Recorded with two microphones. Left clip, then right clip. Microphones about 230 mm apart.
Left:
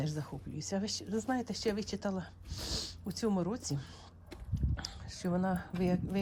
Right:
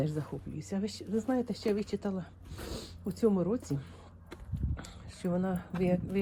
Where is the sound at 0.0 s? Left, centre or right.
Centre.